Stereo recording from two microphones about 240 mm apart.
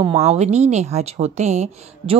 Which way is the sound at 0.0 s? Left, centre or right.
Right.